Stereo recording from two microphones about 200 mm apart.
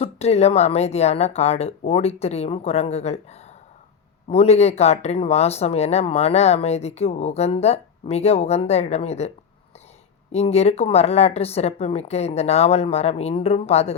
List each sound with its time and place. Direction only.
0.0 s speech: 30° left (ahead or behind)
4.3 s speech: 30° left (ahead or behind)
10.3 s speech: 30° left (ahead or behind)